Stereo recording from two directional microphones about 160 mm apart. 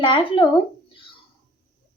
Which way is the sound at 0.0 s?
35° left (ahead or behind).